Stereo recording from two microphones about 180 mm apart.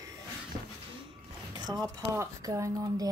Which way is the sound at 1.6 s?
20° right (ahead or behind).